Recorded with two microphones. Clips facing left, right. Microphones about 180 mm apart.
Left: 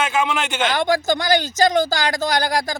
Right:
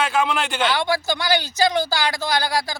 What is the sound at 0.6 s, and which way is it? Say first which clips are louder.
A man's voice: left 4 dB; 45° left (ahead or behind).